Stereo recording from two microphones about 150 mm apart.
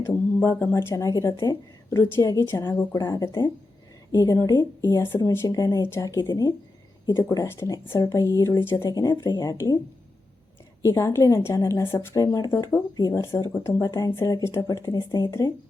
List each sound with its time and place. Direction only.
0.0 s speech: 15° left (ahead or behind)
10.8 s speech: 20° left (ahead or behind)